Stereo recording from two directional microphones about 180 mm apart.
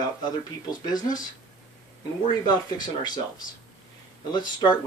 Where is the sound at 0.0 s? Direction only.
20° left (ahead or behind).